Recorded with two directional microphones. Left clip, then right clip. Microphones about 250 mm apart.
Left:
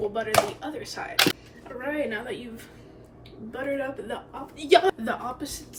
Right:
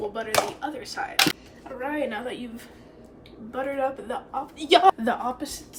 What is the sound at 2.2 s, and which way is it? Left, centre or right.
A woman's voice, centre.